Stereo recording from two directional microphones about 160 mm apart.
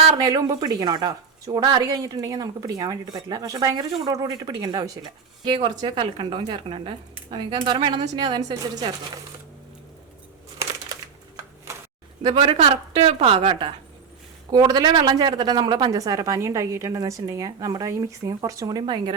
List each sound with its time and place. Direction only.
0.2 s speech: 25° right (ahead or behind)
11.7 s a sound: 15° right (ahead or behind)
12.2 s a woman's voice: 30° right (ahead or behind)